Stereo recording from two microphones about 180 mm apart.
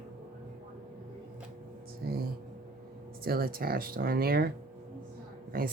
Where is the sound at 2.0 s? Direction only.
60° right (ahead or behind).